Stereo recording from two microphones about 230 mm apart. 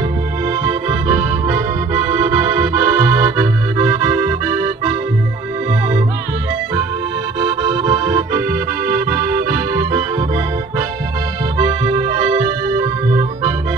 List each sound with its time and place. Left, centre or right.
2.0 s accordion: centre
7.3 s accordion: centre
8.9 s music: centre
11.6 s accordion: centre